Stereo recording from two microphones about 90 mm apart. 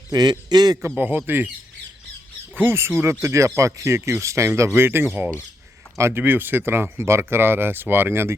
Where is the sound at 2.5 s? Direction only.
25° right (ahead or behind).